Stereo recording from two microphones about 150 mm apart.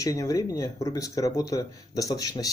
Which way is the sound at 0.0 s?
20° left (ahead or behind).